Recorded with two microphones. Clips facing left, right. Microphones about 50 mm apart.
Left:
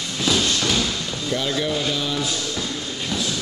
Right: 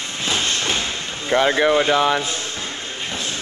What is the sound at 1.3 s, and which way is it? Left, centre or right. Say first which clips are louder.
Speech: right 8 dB; right.